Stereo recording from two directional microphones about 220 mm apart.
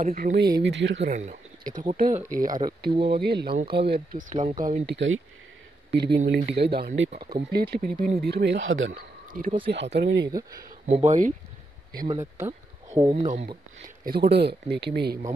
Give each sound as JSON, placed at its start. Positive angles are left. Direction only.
{"t": 0.0, "sound": "speech", "side_deg": -40}
{"t": 0.6, "sound": "speech", "side_deg": -55}
{"t": 1.0, "sound": "speech", "side_deg": -35}
{"t": 2.9, "sound": "speech", "side_deg": -25}
{"t": 3.2, "sound": "speech", "side_deg": -45}
{"t": 4.2, "sound": "speech", "side_deg": -35}
{"t": 4.9, "sound": "speech", "side_deg": -55}
{"t": 8.9, "sound": "speech", "side_deg": -40}
{"t": 9.7, "sound": "speech", "side_deg": -50}
{"t": 10.9, "sound": "speech", "side_deg": -30}
{"t": 12.1, "sound": "speech", "side_deg": -10}
{"t": 13.1, "sound": "speech", "side_deg": -25}
{"t": 13.8, "sound": "speech", "side_deg": -45}